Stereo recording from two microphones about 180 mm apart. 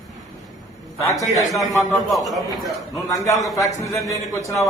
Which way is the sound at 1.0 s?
15° left (ahead or behind).